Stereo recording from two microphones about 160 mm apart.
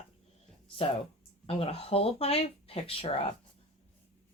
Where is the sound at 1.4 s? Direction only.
40° left (ahead or behind).